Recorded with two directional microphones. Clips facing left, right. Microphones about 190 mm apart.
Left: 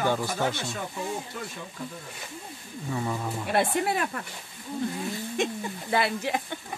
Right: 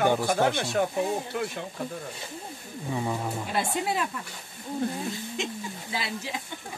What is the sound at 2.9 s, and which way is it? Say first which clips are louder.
Speech: right 1 dB; 15° right (ahead or behind).